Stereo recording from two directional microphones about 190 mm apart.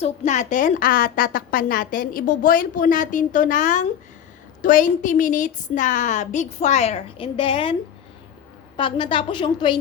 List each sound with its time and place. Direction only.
0.0 s a woman's voice: 40° left (ahead or behind); by 9.7 s 25° left (ahead or behind)